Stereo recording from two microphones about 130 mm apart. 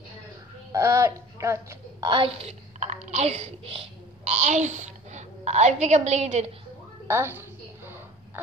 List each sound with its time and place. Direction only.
0.7 s speech: 20° right (ahead or behind)
2.0 s speech: 45° right (ahead or behind); by 6.4 s 65° right (ahead or behind)
7.1 s a sound: 20° right (ahead or behind)